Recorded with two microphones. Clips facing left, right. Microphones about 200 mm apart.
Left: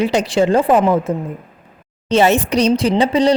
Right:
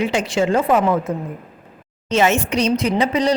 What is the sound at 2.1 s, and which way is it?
Speech, 35° left (ahead or behind).